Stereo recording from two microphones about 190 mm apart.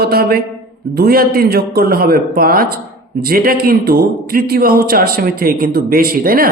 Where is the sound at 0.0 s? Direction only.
55° right (ahead or behind).